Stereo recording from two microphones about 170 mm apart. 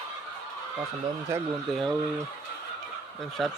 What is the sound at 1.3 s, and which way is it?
Speech, 15° right (ahead or behind).